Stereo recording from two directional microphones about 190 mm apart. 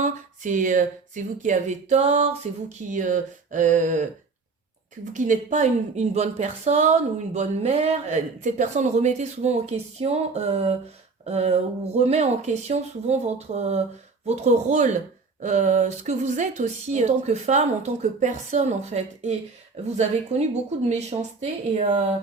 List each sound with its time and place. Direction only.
0.0 s speech: 40° right (ahead or behind)
5.1 s speech: 40° right (ahead or behind)
20.3 s speech: 35° right (ahead or behind)